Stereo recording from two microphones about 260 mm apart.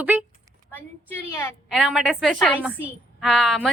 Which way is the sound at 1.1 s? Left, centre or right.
Centre.